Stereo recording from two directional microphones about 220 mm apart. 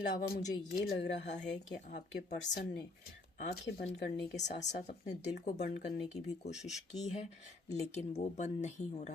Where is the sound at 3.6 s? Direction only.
50° left (ahead or behind).